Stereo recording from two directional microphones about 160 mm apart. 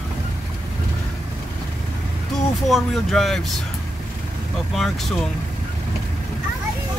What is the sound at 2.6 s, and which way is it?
Speech, centre (ahead or behind).